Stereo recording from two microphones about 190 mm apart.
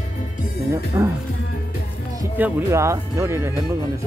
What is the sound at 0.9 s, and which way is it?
Speech, 15° right (ahead or behind).